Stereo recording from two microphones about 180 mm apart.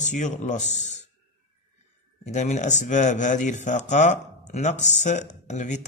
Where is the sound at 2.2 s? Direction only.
40° left (ahead or behind).